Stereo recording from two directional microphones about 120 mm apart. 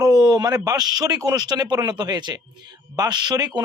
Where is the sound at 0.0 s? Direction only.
35° right (ahead or behind).